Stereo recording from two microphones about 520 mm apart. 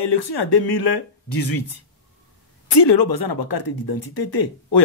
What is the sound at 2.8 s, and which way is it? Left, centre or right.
Speech, left.